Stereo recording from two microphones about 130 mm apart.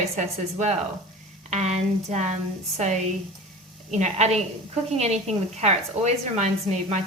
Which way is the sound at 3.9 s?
60° right (ahead or behind).